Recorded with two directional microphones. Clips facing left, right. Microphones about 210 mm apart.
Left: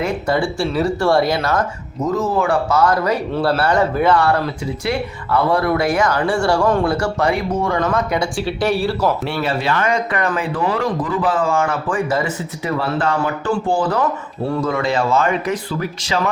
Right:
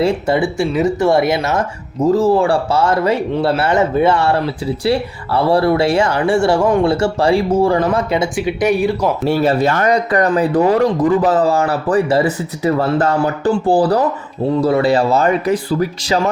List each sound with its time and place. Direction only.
0.0 s speech: 25° right (ahead or behind)
9.2 s speech: 40° right (ahead or behind)